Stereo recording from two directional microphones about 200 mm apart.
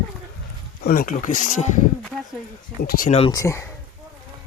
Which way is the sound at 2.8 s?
45° left (ahead or behind).